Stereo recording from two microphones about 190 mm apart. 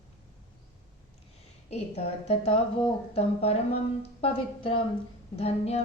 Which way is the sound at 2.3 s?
30° left (ahead or behind).